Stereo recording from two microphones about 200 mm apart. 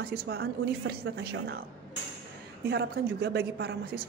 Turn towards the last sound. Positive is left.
turn(degrees=-55)  # may be behind; listen again after turning